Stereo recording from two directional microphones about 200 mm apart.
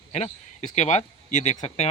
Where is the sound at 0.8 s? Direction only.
35° left (ahead or behind).